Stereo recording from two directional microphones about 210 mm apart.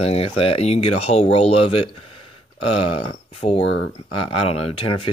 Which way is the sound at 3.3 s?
30° left (ahead or behind).